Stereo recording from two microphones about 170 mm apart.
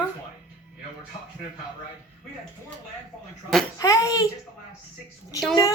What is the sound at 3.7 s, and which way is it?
Speech, 20° left (ahead or behind).